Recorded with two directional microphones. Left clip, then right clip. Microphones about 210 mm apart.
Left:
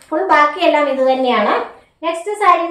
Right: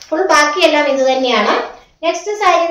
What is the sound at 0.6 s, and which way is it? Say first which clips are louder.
A child's voice: right 2 dB; 10° left (ahead or behind).